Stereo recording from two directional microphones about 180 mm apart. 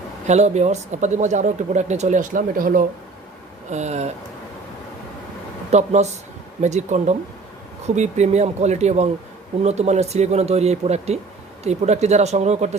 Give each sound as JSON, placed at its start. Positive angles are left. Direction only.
{"t": 0.3, "sound": "speech", "side_deg": -40}
{"t": 3.7, "sound": "speech", "side_deg": -40}
{"t": 5.7, "sound": "speech", "side_deg": -40}